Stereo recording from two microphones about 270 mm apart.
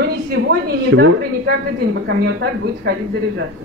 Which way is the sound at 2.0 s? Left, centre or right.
Right.